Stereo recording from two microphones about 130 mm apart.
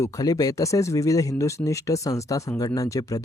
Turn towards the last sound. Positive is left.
turn(degrees=25)  # may be behind; listen again after turning